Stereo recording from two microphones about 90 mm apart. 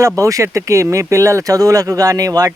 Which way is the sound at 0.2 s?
35° right (ahead or behind).